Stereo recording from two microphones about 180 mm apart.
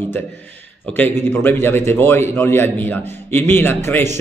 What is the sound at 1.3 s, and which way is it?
A man's voice, 10° left (ahead or behind).